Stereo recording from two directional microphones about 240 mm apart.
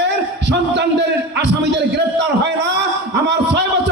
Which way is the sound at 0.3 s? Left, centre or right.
Right.